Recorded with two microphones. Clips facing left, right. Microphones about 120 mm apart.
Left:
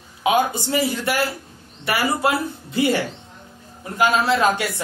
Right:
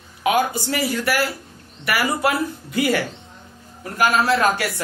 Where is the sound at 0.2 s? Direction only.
25° left (ahead or behind).